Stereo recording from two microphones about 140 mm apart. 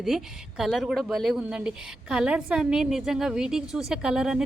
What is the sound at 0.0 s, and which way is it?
A woman's voice, centre (ahead or behind).